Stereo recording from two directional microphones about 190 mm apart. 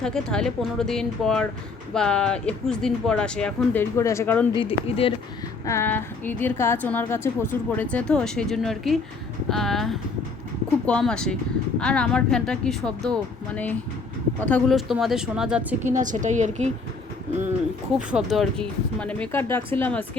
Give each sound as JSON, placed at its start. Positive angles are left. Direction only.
{"t": 0.0, "sound": "speech", "side_deg": 5}
{"t": 4.6, "sound": "speech", "side_deg": 30}
{"t": 5.6, "sound": "a woman's voice", "side_deg": 15}
{"t": 15.8, "sound": "a woman's voice", "side_deg": -40}
{"t": 17.9, "sound": "a woman's voice", "side_deg": -5}